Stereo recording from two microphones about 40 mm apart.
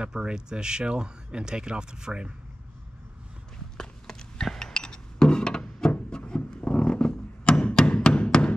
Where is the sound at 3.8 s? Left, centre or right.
Centre.